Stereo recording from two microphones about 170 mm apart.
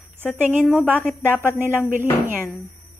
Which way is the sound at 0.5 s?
10° right (ahead or behind).